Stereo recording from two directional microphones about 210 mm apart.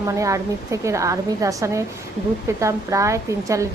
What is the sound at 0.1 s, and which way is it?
A woman's voice, 15° right (ahead or behind).